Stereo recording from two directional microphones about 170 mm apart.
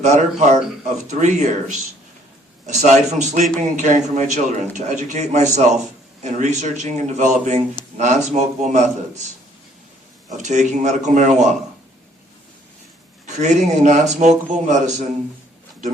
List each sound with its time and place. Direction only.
0.0 s a man's voice: 45° right (ahead or behind)
10.2 s a man's voice: 45° right (ahead or behind)
13.2 s a man's voice: 45° right (ahead or behind)